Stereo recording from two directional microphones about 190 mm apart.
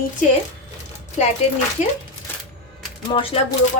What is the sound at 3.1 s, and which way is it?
Speech, 30° left (ahead or behind).